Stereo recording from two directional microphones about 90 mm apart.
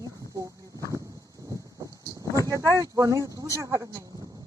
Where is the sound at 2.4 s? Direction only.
35° right (ahead or behind).